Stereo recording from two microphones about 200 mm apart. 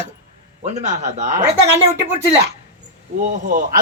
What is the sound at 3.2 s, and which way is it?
Speech, 40° right (ahead or behind).